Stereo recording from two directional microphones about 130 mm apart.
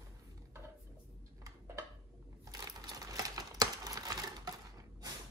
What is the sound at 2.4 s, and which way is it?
Crumpling, 30° right (ahead or behind).